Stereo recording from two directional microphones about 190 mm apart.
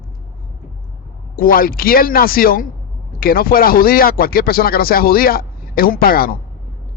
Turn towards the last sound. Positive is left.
turn(degrees=50)  # may be behind; listen again after turning